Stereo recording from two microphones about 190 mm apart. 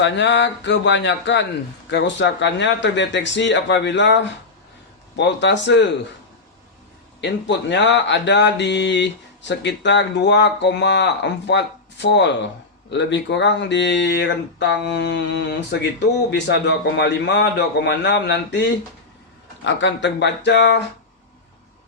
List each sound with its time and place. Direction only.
0.0 s speech: 70° left (ahead or behind)
7.2 s speech: 70° left (ahead or behind)